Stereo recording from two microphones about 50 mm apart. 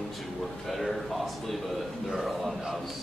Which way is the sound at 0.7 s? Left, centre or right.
Centre.